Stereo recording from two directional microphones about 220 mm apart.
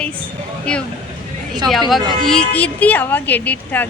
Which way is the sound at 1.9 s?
Centre (ahead or behind).